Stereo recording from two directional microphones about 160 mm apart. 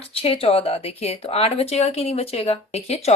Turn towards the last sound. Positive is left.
turn(degrees=40)  # may be behind; listen again after turning